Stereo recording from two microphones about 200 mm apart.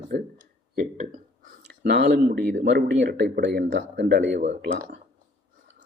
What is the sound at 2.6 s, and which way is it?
Speech, 60° right (ahead or behind).